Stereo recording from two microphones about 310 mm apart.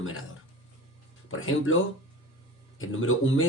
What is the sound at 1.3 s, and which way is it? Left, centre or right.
Speech, left.